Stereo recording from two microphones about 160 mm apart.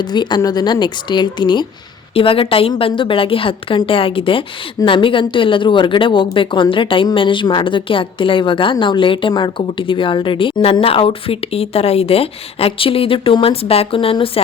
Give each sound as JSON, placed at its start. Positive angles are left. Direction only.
{"t": 0.0, "sound": "a woman's voice", "side_deg": 25}